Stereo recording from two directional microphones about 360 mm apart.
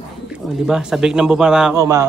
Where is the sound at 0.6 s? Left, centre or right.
Centre.